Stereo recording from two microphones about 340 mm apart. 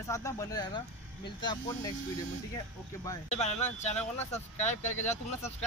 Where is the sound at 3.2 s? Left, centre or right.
Centre.